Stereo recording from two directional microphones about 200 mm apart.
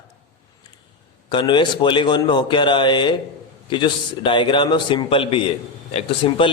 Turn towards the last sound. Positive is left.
turn(degrees=25)  # may be behind; listen again after turning